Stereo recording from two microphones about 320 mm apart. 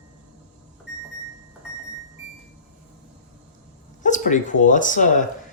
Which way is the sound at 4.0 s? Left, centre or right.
Left.